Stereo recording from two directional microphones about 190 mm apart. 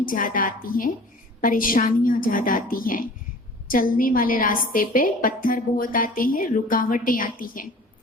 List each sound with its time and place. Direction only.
0.0 s a woman's voice: 45° left (ahead or behind)